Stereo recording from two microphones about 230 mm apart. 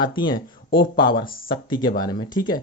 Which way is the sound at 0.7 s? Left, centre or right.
Left.